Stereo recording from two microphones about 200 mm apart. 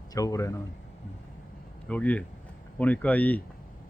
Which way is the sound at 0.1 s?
15° left (ahead or behind).